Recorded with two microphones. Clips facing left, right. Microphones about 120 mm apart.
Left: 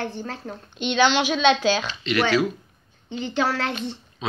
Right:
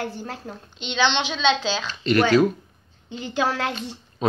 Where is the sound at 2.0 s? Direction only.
45° right (ahead or behind).